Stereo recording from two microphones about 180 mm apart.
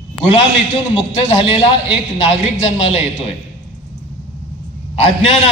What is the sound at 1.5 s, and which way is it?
Speech, 30° left (ahead or behind).